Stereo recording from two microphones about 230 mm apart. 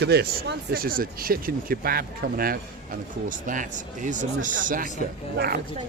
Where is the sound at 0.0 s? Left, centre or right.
Right.